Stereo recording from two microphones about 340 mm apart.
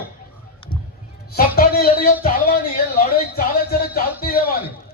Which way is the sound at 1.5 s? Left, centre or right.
Left.